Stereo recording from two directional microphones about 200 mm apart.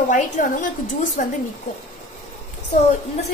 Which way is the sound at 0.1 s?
40° left (ahead or behind).